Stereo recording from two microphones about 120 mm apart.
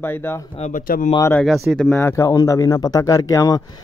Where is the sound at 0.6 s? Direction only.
90° left.